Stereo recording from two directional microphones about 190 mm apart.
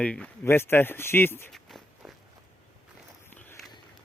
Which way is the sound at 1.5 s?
Centre (ahead or behind).